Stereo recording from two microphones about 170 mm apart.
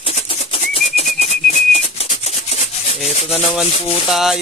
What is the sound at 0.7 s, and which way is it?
Whistling, 40° left (ahead or behind).